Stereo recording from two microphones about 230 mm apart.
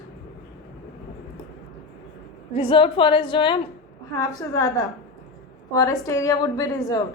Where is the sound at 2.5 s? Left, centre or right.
Left.